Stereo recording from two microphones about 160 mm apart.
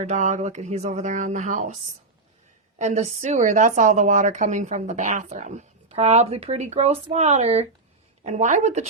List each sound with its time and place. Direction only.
0.0 s a woman's voice: 50° right (ahead or behind)
2.7 s a woman's voice: 45° right (ahead or behind)